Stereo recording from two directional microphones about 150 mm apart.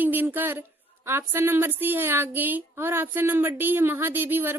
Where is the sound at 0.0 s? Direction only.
10° right (ahead or behind).